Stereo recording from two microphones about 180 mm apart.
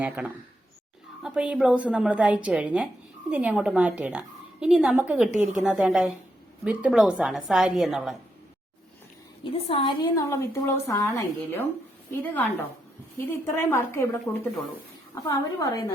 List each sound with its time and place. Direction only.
0.2 s a woman's voice: 5° right (ahead or behind)
9.4 s a woman's voice: 30° left (ahead or behind); by 14.4 s 5° left (ahead or behind)
15.3 s a woman's voice: 20° left (ahead or behind)